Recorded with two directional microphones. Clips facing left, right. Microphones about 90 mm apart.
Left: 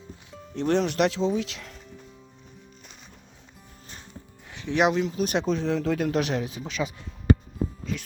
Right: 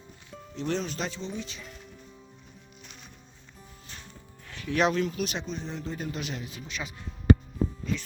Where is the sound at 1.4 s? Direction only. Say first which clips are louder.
Left 7 dB; 85° left.